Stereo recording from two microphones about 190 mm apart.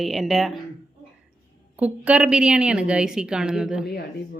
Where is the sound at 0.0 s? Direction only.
Centre (ahead or behind).